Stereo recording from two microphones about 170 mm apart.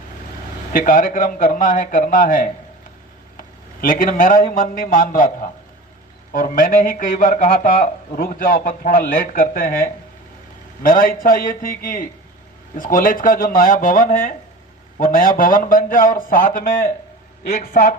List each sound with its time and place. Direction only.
0.7 s a man's voice: 55° left (ahead or behind)
3.3 s a sound: 55° left (ahead or behind)
4.5 s a man's voice: 55° left (ahead or behind)